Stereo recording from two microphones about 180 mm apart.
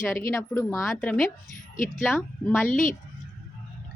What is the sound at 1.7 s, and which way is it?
Speech, 45° left (ahead or behind).